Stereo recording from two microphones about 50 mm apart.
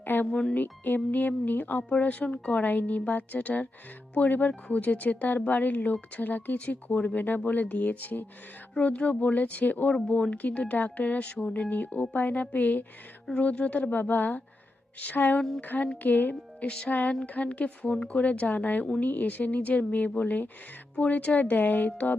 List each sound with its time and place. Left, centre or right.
0.0 s speech: left
0.3 s speech: centre
0.5 s speech: left
11.7 s speech: left
16.3 s speech: left
16.9 s speech: left